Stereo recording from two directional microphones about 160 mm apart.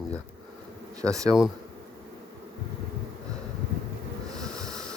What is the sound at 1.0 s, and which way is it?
Speech, 20° right (ahead or behind).